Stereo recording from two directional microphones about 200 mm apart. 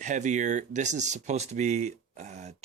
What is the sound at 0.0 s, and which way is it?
Speech, 35° right (ahead or behind).